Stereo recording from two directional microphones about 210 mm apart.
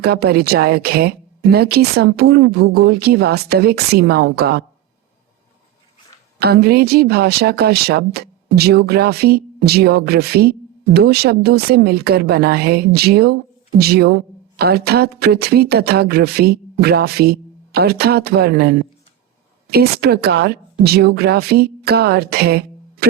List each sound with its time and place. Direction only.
0.0 s speech: 50° right (ahead or behind)
6.4 s speech: 50° right (ahead or behind)